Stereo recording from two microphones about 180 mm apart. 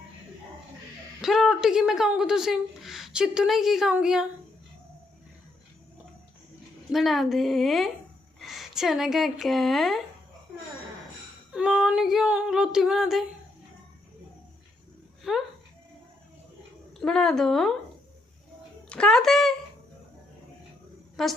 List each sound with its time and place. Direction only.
1.2 s speech: centre (ahead or behind)
6.9 s a woman's voice: centre (ahead or behind)
11.5 s speech: 5° right (ahead or behind)
15.3 s speech: centre (ahead or behind)
17.0 s speech: 5° left (ahead or behind)
18.9 s speech: 5° left (ahead or behind)
21.2 s speech: centre (ahead or behind)